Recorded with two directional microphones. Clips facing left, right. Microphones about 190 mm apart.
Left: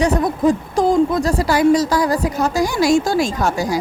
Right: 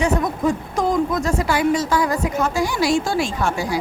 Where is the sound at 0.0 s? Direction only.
35° left (ahead or behind).